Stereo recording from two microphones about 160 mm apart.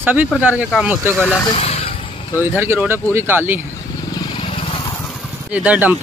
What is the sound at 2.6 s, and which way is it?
Speech, 15° right (ahead or behind).